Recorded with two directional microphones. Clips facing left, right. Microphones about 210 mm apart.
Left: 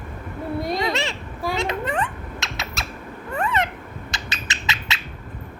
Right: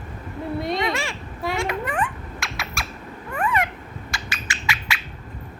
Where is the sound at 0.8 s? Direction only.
25° left (ahead or behind).